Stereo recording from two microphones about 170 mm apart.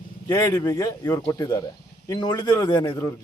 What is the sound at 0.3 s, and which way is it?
A man's voice, 15° left (ahead or behind).